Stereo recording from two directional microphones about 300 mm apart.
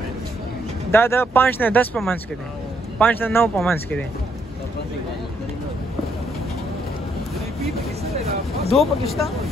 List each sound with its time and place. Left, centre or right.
0.9 s speech: centre
8.0 s vehicle: right
8.7 s speech: centre